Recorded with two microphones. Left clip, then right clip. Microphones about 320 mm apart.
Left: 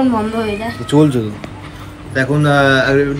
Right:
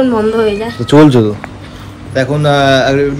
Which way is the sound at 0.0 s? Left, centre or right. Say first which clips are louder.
Right 6 dB; centre.